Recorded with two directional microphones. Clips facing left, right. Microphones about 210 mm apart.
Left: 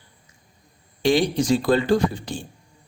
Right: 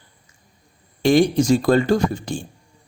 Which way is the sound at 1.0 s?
45° right (ahead or behind).